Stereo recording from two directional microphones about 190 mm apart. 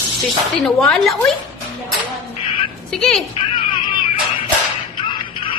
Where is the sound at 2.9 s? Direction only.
5° left (ahead or behind).